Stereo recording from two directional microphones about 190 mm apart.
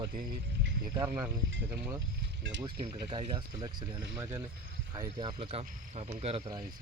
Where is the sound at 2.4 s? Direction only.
70° right (ahead or behind).